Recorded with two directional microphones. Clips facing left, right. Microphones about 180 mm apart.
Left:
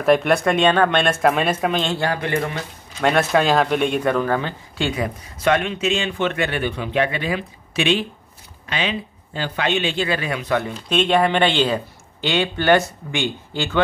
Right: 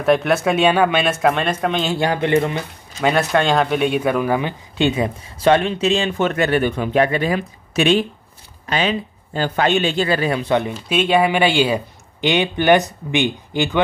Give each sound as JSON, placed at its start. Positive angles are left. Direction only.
{"t": 0.0, "sound": "speech", "side_deg": 0}
{"t": 1.9, "sound": "a man's voice", "side_deg": -20}
{"t": 3.0, "sound": "speech", "side_deg": 0}
{"t": 10.7, "sound": "speech", "side_deg": -5}